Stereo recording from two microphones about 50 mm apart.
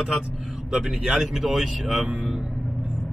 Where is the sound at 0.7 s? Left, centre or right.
Centre.